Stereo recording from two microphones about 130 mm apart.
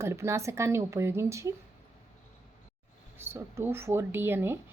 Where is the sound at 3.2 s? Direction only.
20° right (ahead or behind).